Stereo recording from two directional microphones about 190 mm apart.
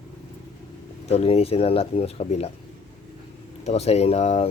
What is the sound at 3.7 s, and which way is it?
Speech, 35° left (ahead or behind).